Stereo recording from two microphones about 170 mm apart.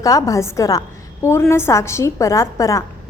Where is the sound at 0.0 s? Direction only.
20° left (ahead or behind).